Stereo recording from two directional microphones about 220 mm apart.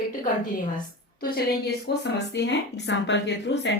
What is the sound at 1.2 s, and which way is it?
A woman's voice, 40° left (ahead or behind).